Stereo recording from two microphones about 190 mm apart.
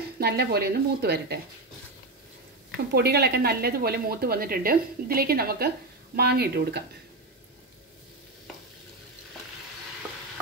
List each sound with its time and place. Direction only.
0.2 s a woman's voice: 55° right (ahead or behind)
2.9 s a woman's voice: 55° right (ahead or behind)